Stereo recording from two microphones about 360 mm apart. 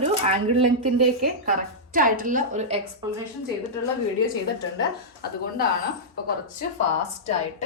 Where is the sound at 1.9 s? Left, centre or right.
Right.